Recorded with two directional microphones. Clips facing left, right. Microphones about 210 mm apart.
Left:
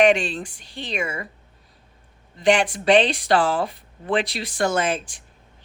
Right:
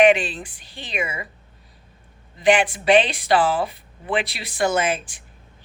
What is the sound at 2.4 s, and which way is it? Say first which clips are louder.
A woman's voice: right 1 dB; 5° right (ahead or behind).